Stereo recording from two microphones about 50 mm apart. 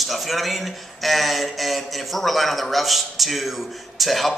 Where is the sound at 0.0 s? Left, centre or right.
Centre.